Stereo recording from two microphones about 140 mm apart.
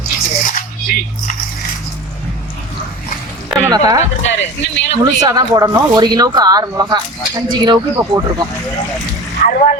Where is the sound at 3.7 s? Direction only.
25° right (ahead or behind).